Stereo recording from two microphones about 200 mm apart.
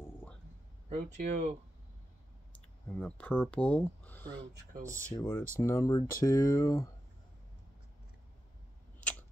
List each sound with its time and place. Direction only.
0.0 s a sound: 10° left (ahead or behind)
0.8 s speech: 35° right (ahead or behind)
2.9 s speech: 5° left (ahead or behind)
4.8 s speech: 15° right (ahead or behind)
5.1 s speech: 10° left (ahead or behind)